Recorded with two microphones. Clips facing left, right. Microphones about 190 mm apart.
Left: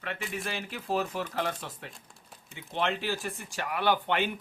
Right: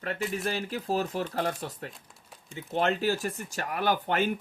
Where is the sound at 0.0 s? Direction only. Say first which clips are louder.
Right 5 dB; 40° right (ahead or behind).